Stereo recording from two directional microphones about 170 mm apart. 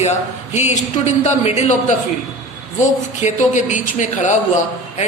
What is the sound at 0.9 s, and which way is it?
A man's voice, 45° left (ahead or behind).